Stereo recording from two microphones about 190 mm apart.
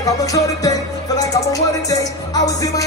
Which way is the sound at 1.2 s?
20° left (ahead or behind).